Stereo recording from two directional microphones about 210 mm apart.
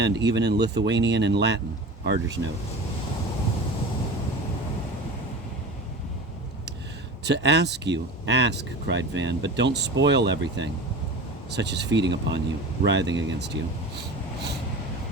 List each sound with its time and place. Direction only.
0.0 s speech: 55° right (ahead or behind)
7.3 s speech: 55° right (ahead or behind)